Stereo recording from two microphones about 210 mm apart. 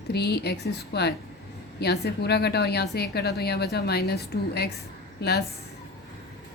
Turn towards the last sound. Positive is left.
turn(degrees=50)  # may be behind; listen again after turning